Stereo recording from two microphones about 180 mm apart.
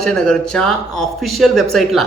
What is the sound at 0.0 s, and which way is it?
Speech, 5° left (ahead or behind).